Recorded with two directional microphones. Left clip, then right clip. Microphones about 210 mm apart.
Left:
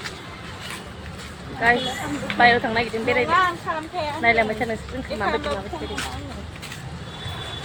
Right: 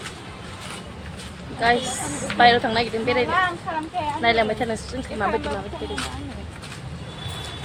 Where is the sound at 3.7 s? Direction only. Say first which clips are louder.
Left 1 dB; 55° left (ahead or behind).